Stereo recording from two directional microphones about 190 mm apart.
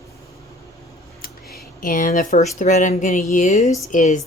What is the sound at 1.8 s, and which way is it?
A woman's voice, 45° left (ahead or behind).